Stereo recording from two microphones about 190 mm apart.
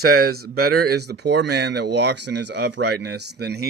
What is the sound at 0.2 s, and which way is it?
Speech, 55° right (ahead or behind).